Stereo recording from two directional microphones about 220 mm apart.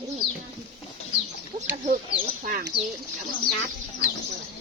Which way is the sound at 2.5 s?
40° right (ahead or behind).